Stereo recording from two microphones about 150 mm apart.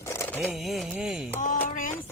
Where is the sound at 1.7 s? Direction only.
65° left (ahead or behind).